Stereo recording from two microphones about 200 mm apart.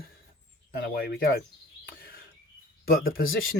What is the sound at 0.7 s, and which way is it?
Speech, 50° left (ahead or behind).